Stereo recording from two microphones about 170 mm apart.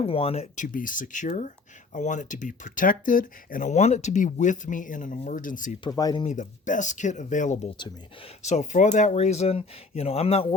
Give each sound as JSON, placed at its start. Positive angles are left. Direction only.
{"t": 0.0, "sound": "speech", "side_deg": 35}
{"t": 5.8, "sound": "speech", "side_deg": 20}
{"t": 6.2, "sound": "speech", "side_deg": 45}